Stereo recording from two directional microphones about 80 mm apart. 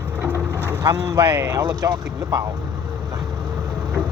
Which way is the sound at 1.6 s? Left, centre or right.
Right.